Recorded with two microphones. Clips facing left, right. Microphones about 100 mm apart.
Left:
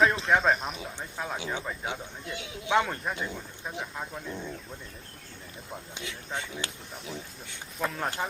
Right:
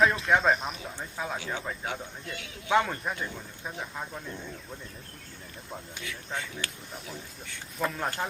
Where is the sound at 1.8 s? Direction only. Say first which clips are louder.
Even; 20° left (ahead or behind).